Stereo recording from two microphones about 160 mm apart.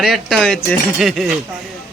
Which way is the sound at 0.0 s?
Centre (ahead or behind).